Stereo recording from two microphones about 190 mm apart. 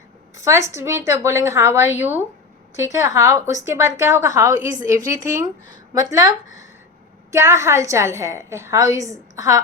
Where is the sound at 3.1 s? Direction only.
15° right (ahead or behind).